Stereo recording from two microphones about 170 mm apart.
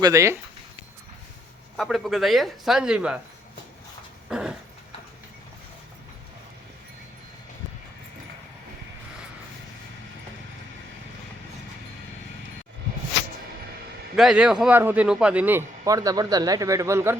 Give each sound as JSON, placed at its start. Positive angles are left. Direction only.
{"t": 0.0, "sound": "a man's voice", "side_deg": -20}
{"t": 1.7, "sound": "speech", "side_deg": 0}
{"t": 4.3, "sound": "dog", "side_deg": -5}
{"t": 14.2, "sound": "a man's voice", "side_deg": -5}